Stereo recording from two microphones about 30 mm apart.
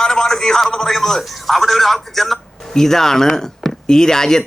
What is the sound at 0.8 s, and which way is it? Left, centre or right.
Speech, centre.